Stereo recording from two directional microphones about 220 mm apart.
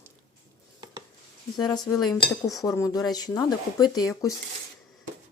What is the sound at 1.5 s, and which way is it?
Speech, 20° left (ahead or behind).